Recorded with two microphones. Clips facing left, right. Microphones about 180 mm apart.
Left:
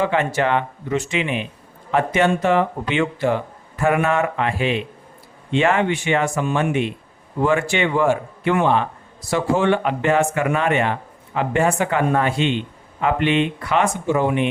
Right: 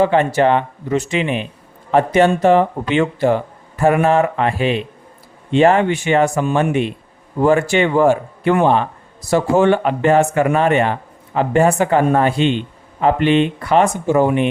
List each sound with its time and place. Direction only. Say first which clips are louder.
0.0 s speech: right 6 dB; 35° right (ahead or behind)